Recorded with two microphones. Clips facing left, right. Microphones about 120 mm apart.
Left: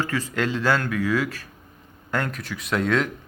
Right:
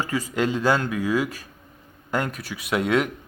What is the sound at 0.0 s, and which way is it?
Speech, 15° right (ahead or behind).